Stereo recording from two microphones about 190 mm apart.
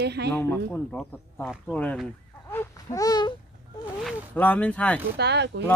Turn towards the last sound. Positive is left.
turn(degrees=-65)  # may be behind; listen again after turning